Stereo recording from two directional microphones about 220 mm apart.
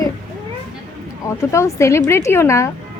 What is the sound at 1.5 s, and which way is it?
A woman's voice, 10° left (ahead or behind).